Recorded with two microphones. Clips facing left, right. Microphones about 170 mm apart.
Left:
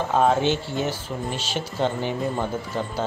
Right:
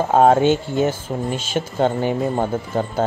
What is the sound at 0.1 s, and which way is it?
Speech, 50° right (ahead or behind).